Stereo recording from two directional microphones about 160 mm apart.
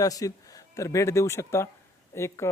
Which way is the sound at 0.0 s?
20° left (ahead or behind).